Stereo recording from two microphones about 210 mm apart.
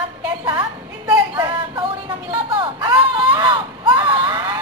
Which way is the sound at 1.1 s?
20° right (ahead or behind).